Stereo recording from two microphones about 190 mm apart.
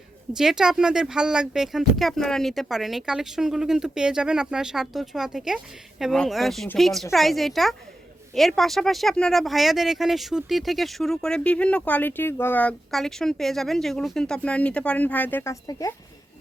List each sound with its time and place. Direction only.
0.3 s speech: 5° right (ahead or behind); by 16.0 s 15° left (ahead or behind)